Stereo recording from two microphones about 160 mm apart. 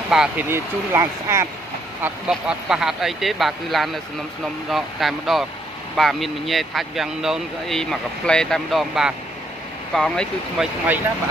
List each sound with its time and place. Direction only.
0.1 s speech: 5° right (ahead or behind)
0.5 s speech: 15° right (ahead or behind); by 10.7 s 5° left (ahead or behind)